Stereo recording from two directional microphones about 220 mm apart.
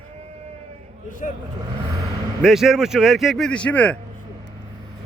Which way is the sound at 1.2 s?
35° left (ahead or behind).